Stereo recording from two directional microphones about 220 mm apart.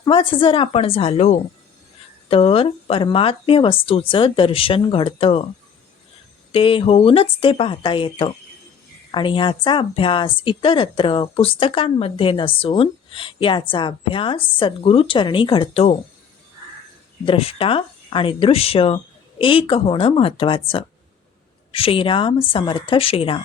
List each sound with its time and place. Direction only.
0.0 s speech: 25° left (ahead or behind)
6.5 s speech: 25° left (ahead or behind)
17.2 s speech: 25° left (ahead or behind)